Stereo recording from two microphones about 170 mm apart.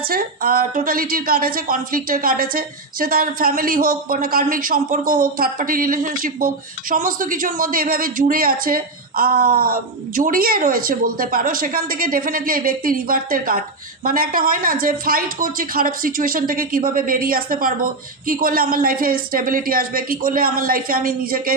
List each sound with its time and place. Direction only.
0.0 s speech: 60° right (ahead or behind)